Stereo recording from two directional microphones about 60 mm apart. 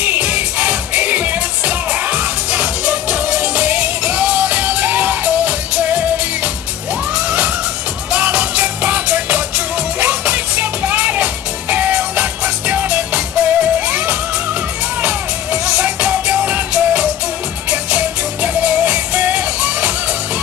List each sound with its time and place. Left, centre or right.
0.0 s music: right